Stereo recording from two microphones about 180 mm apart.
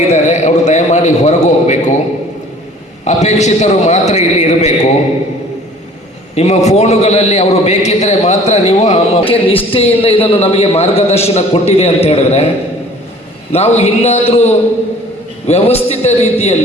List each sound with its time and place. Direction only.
0.1 s a sound: 40° left (ahead or behind)
3.0 s a man's voice: 40° left (ahead or behind)
6.3 s a man's voice: 35° left (ahead or behind)
13.5 s a man's voice: 35° left (ahead or behind)